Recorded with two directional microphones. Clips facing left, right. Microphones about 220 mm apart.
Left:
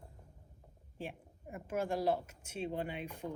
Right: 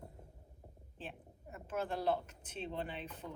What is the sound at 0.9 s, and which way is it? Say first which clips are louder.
A woman's voice: left 5 dB; 10° left (ahead or behind).